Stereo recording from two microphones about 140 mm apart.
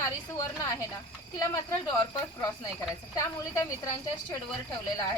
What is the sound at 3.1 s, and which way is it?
A woman's voice, 20° left (ahead or behind).